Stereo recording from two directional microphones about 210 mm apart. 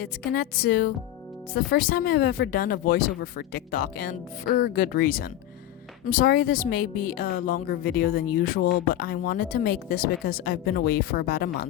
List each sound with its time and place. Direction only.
0.0 s speech: 45° left (ahead or behind)